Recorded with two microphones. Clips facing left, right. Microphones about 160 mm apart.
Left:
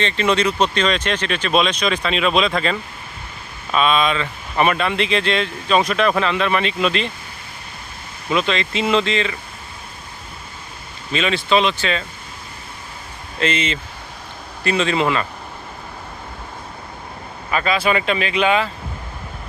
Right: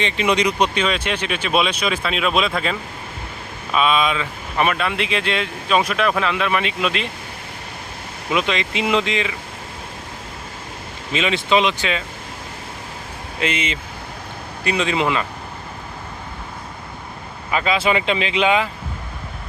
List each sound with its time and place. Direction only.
0.0 s speech: 15° right (ahead or behind)
8.3 s speech: 15° right (ahead or behind)
11.1 s speech: 20° right (ahead or behind)
13.4 s speech: 10° right (ahead or behind)
17.5 s speech: 20° right (ahead or behind)